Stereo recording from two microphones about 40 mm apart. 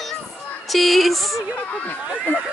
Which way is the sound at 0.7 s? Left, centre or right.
Centre.